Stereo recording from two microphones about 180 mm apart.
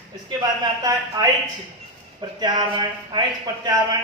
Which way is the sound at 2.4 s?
25° right (ahead or behind).